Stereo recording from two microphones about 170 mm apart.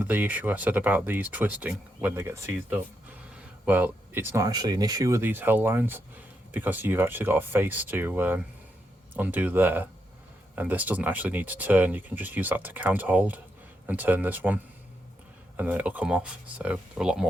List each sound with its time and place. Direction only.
0.0 s speech: 10° right (ahead or behind)
3.7 s speech: 10° right (ahead or behind)